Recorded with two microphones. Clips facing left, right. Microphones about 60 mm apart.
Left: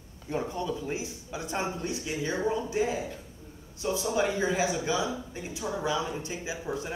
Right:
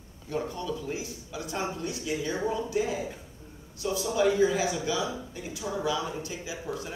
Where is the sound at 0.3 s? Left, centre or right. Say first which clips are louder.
Left 1 dB; left.